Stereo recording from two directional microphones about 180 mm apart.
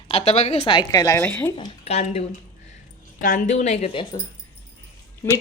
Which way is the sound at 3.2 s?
50° left (ahead or behind).